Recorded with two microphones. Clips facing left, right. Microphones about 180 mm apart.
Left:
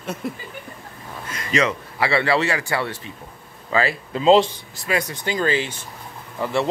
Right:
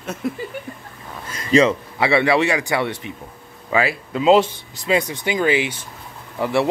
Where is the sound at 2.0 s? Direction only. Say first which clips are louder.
Right 3 dB; 15° right (ahead or behind).